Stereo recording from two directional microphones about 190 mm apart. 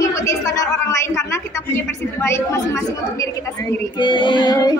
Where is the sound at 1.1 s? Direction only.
15° left (ahead or behind).